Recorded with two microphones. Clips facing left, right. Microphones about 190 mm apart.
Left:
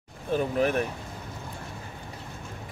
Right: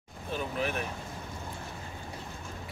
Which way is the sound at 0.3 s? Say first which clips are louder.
Left 8 dB; 45° left (ahead or behind).